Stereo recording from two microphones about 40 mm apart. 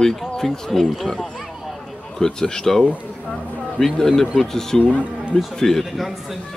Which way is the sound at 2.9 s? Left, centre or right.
Left.